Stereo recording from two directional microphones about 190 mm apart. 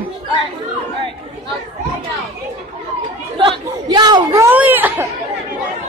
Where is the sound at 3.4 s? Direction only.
20° right (ahead or behind).